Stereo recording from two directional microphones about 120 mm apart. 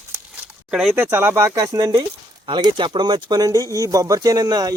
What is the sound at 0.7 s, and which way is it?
Speech, 5° right (ahead or behind).